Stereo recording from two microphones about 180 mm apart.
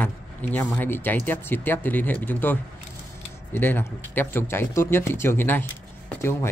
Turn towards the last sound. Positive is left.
turn(degrees=10)  # may be behind; listen again after turning